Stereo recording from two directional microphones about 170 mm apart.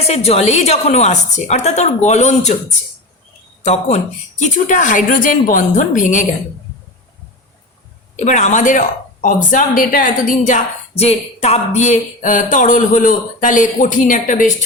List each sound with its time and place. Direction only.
0.1 s a woman's voice: 40° left (ahead or behind)
8.2 s speech: 45° left (ahead or behind)